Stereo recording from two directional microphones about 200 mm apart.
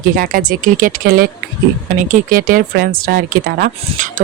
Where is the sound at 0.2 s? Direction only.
45° right (ahead or behind).